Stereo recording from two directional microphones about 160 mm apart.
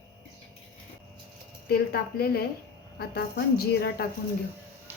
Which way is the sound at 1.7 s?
70° left (ahead or behind).